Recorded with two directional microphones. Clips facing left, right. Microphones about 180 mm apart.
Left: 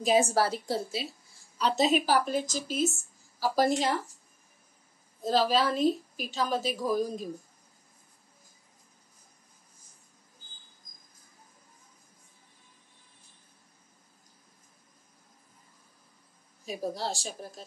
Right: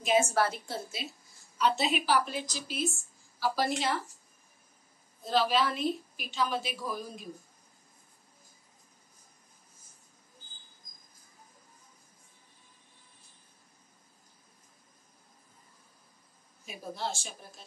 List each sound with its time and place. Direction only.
0.0 s a woman's voice: 35° left (ahead or behind)
5.2 s a woman's voice: 40° left (ahead or behind)
16.6 s a woman's voice: 35° left (ahead or behind)